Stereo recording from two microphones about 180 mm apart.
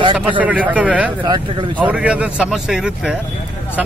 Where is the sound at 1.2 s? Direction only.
25° right (ahead or behind).